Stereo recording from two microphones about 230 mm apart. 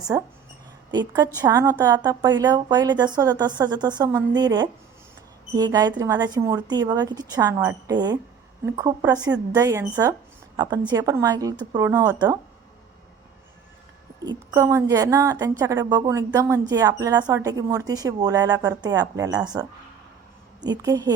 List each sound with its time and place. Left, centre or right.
0.1 s a woman's voice: centre
14.3 s a woman's voice: centre
20.7 s a woman's voice: centre